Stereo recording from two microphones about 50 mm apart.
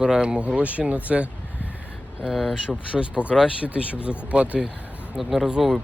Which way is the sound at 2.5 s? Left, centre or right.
Right.